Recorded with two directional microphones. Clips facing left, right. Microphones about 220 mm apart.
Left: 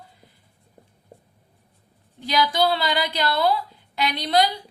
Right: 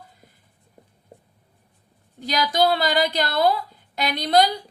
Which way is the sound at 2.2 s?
45° right (ahead or behind).